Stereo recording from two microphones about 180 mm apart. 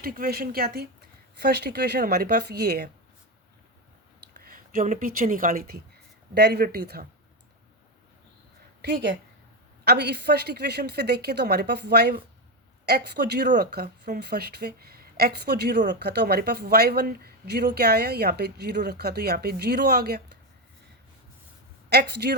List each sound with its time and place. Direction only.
0.0 s speech: 55° right (ahead or behind)
4.4 s speech: 55° right (ahead or behind)
8.8 s speech: 65° right (ahead or behind)
21.8 s speech: 65° right (ahead or behind)